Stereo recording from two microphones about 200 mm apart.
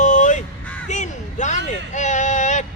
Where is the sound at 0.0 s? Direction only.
40° left (ahead or behind).